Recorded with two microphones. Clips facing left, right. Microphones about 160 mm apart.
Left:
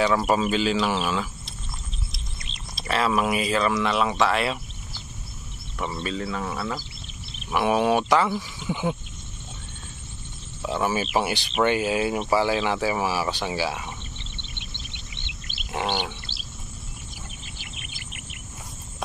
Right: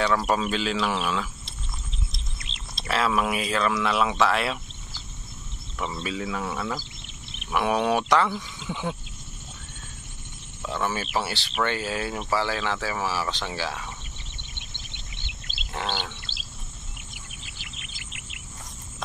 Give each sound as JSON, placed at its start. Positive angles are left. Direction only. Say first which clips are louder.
{"t": 0.0, "sound": "speech", "louder": "left 2 dB", "side_deg": 5}
{"t": 2.9, "sound": "speech", "louder": "left 2 dB", "side_deg": 0}
{"t": 5.8, "sound": "speech", "louder": "left 1 dB", "side_deg": 10}
{"t": 6.0, "sound": "speech", "louder": "even", "side_deg": -5}
{"t": 10.6, "sound": "speech", "louder": "left 4 dB", "side_deg": 10}
{"t": 15.2, "sound": "wild animals", "louder": "left 2 dB", "side_deg": 15}
{"t": 17.8, "sound": "bird vocalization", "louder": "left 3 dB", "side_deg": -90}